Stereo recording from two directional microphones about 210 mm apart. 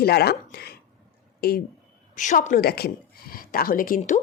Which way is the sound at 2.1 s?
35° left (ahead or behind).